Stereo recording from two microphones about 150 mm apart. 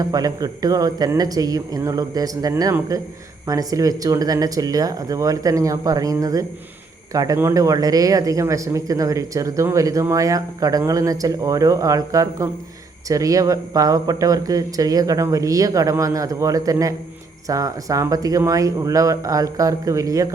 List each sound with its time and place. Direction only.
0.0 s speech: 25° right (ahead or behind)